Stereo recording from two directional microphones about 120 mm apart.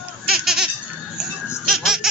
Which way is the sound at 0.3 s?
5° right (ahead or behind).